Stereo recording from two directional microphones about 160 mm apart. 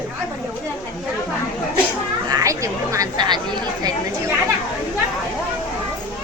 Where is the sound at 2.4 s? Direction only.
20° right (ahead or behind).